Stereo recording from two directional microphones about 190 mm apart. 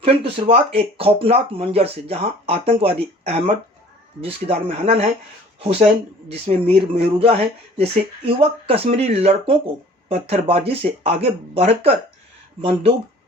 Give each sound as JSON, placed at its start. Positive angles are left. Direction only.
{"t": 0.0, "sound": "speech", "side_deg": -30}